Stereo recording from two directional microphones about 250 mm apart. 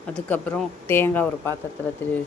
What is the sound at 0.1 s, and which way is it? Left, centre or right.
Speech, centre.